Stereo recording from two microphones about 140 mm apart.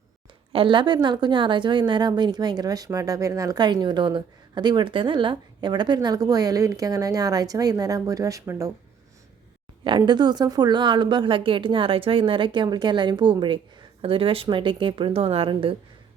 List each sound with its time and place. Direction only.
0.5 s a woman's voice: 40° right (ahead or behind)
10.1 s a woman's voice: 30° right (ahead or behind)